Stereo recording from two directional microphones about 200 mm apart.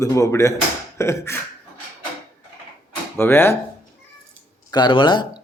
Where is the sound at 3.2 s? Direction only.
10° left (ahead or behind).